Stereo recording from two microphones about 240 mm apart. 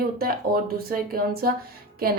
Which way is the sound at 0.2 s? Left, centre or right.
Right.